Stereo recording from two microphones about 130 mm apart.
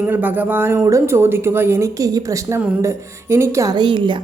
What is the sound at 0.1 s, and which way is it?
A woman's voice, 15° right (ahead or behind).